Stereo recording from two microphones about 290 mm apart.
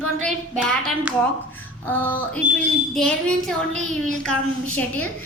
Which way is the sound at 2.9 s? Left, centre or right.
Centre.